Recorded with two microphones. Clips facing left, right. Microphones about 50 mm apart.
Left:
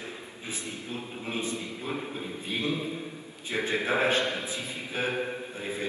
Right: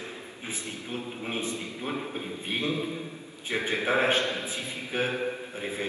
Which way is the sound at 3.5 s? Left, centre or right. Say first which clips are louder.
Right 1 dB; right.